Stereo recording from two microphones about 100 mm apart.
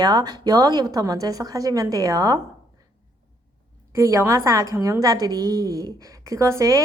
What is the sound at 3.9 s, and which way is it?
A woman's voice, 30° right (ahead or behind).